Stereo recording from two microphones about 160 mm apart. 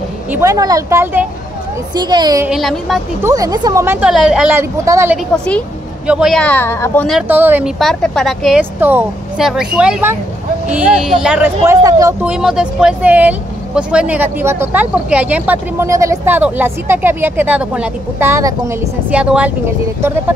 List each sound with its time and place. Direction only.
0.3 s speech: 20° right (ahead or behind)
2.0 s speech: 25° right (ahead or behind)
2.4 s speech: centre (ahead or behind)
3.2 s speech: 20° right (ahead or behind)
4.1 s speech: 5° right (ahead or behind)
5.1 s speech: 5° left (ahead or behind)
6.4 s speech: 15° left (ahead or behind)
7.2 s speech: 10° right (ahead or behind)
7.8 s speech: 5° left (ahead or behind)
8.5 s speech: 10° right (ahead or behind)
9.4 s speech: centre (ahead or behind)
11.6 s speech: 20° right (ahead or behind)
12.2 s speech: 5° right (ahead or behind)